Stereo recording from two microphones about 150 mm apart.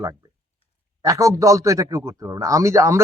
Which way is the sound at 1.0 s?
20° right (ahead or behind).